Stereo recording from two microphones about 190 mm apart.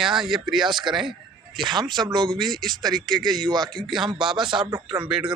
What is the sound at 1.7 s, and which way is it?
Speech, 25° right (ahead or behind).